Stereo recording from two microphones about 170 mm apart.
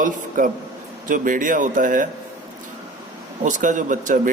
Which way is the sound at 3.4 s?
50° right (ahead or behind).